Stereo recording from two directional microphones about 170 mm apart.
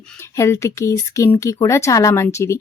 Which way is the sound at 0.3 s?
15° left (ahead or behind).